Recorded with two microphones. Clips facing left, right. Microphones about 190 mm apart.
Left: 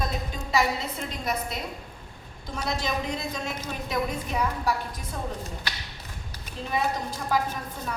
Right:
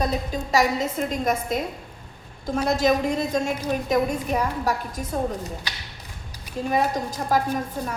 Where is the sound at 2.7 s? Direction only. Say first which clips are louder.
Right 8 dB; 45° right (ahead or behind).